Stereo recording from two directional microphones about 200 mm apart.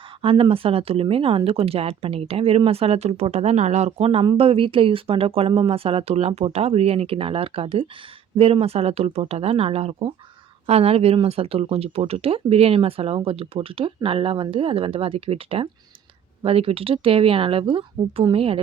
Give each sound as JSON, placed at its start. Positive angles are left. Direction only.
{"t": 0.2, "sound": "speech", "side_deg": -25}